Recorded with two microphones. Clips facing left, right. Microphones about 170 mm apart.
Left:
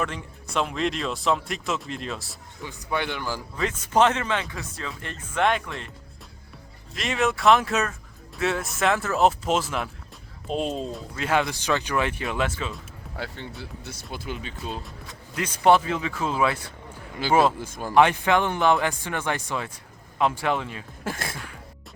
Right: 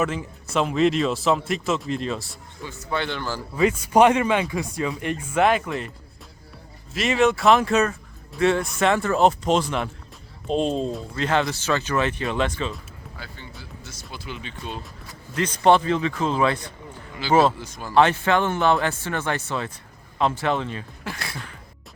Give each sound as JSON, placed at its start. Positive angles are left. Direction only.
{"t": 0.0, "sound": "speech", "side_deg": -5}
{"t": 2.6, "sound": "speech", "side_deg": 15}
{"t": 3.5, "sound": "speech", "side_deg": -10}
{"t": 6.9, "sound": "speech", "side_deg": 0}
{"t": 13.1, "sound": "speech", "side_deg": 70}
{"t": 15.4, "sound": "speech", "side_deg": 10}
{"t": 17.2, "sound": "speech", "side_deg": 50}
{"t": 17.9, "sound": "speech", "side_deg": 15}
{"t": 21.0, "sound": "speech", "side_deg": 45}